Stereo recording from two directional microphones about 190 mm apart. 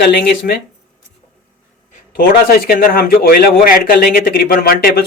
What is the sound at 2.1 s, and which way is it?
Speech, 50° left (ahead or behind).